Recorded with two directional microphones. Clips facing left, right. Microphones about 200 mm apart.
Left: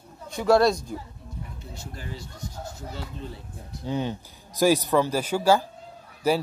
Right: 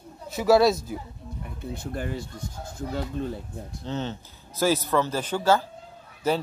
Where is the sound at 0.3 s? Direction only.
5° right (ahead or behind).